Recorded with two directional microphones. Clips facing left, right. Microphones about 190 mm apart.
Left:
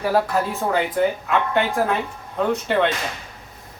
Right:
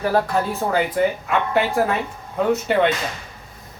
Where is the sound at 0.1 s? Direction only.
Centre (ahead or behind).